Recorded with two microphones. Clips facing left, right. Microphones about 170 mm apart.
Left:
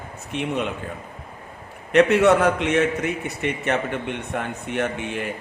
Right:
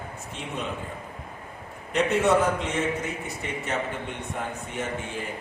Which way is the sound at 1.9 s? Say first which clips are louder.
Left 6 dB; 75° left (ahead or behind).